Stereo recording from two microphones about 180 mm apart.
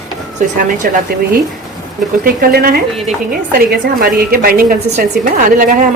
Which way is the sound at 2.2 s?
55° right (ahead or behind).